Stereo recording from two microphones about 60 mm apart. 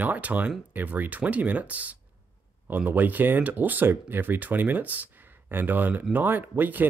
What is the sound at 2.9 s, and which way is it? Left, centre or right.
Speech, right.